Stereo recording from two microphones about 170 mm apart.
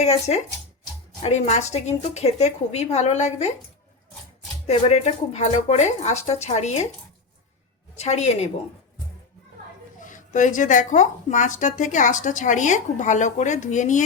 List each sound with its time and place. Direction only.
0.0 s a woman's voice: 40° left (ahead or behind)
4.6 s a woman's voice: 40° left (ahead or behind)
7.9 s a woman's voice: 40° left (ahead or behind)
10.0 s speech: 50° left (ahead or behind)